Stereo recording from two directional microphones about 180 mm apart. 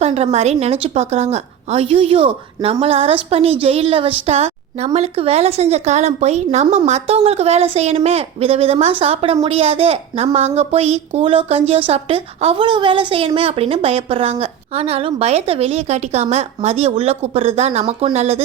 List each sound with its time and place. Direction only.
0.0 s a woman's voice: 35° right (ahead or behind)